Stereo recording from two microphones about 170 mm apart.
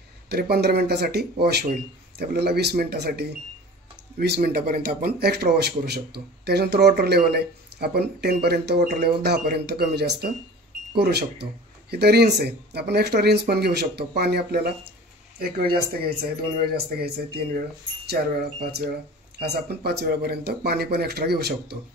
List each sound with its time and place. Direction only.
0.3 s a man's voice: 70° right (ahead or behind)
4.4 s a man's voice: 60° right (ahead or behind)